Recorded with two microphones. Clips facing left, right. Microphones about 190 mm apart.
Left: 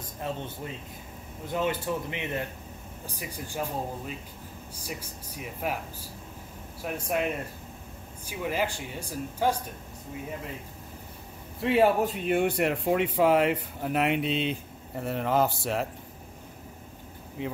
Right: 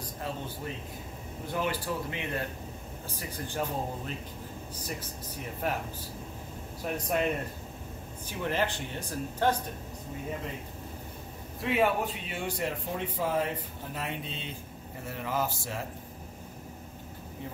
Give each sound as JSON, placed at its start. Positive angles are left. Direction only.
{"t": 1.5, "sound": "a man's voice", "side_deg": 20}
{"t": 6.8, "sound": "speech", "side_deg": 10}
{"t": 8.3, "sound": "speech", "side_deg": 10}
{"t": 11.7, "sound": "speech", "side_deg": 40}
{"t": 17.4, "sound": "speech", "side_deg": 80}